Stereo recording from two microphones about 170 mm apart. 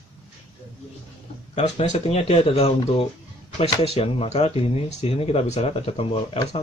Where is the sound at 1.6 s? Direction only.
35° left (ahead or behind).